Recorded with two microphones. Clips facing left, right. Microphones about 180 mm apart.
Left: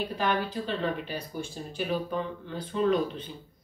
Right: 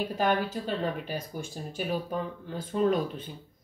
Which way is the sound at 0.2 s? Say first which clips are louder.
Right 2 dB; 45° right (ahead or behind).